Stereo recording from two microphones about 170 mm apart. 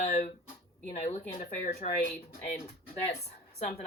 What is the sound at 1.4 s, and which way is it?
Speech, 40° left (ahead or behind).